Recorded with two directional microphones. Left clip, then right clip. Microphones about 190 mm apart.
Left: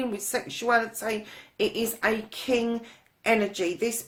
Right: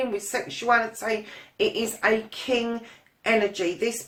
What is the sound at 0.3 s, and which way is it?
Speech, 40° left (ahead or behind).